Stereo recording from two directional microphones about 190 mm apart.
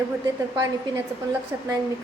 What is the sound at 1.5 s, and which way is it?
Speech, 15° right (ahead or behind).